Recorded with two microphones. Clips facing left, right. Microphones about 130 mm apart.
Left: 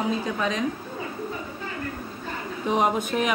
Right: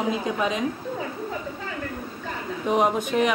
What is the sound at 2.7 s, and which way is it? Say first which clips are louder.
Speech: right 1 dB; centre (ahead or behind).